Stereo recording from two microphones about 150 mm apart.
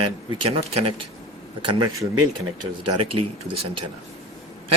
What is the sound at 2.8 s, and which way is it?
Speech, 40° right (ahead or behind).